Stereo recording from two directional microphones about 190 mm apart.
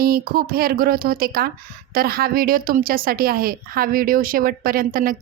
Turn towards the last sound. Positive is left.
turn(degrees=-50)  # may be behind; listen again after turning